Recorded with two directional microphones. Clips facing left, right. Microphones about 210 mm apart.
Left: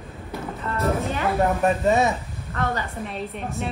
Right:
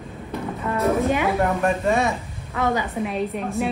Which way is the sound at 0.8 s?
15° right (ahead or behind).